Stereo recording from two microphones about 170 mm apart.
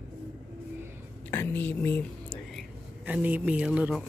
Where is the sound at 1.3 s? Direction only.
15° left (ahead or behind).